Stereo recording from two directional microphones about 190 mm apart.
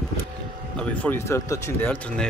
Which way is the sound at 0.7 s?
10° left (ahead or behind).